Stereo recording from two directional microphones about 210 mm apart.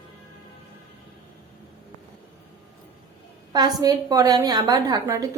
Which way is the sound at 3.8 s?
15° right (ahead or behind).